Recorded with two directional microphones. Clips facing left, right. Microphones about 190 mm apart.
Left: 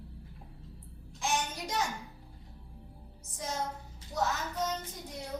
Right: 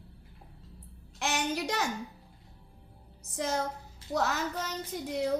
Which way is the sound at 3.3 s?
75° right (ahead or behind).